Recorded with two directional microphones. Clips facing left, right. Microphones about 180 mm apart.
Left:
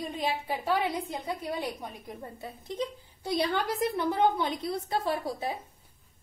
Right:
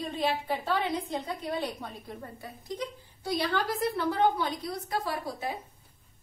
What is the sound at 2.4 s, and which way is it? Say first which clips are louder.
A woman's voice: left 3 dB; 25° left (ahead or behind).